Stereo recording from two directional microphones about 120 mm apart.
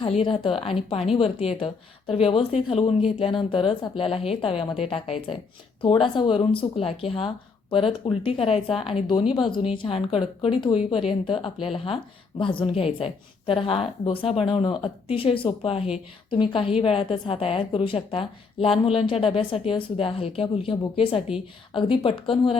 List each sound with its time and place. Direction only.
0.0 s a woman's voice: 45° left (ahead or behind)
5.8 s a woman's voice: 45° left (ahead or behind)